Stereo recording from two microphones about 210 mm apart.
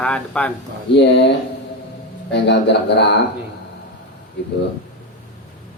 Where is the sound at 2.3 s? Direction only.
55° left (ahead or behind).